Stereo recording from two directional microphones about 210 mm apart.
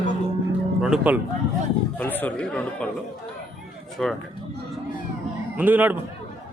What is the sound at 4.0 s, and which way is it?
Speech, 5° left (ahead or behind).